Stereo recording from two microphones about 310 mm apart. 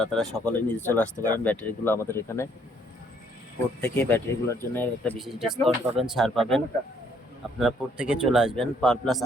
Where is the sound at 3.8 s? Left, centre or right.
Centre.